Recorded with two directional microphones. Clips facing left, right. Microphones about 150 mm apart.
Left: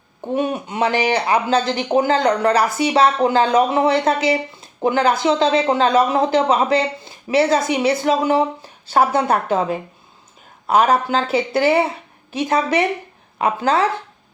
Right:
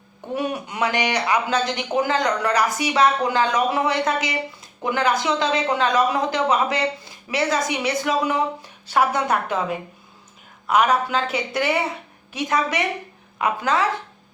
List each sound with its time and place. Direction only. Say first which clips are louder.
0.3 s a man's voice: left 4 dB; 25° left (ahead or behind)